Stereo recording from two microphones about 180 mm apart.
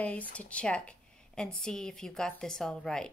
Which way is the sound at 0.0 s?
10° left (ahead or behind).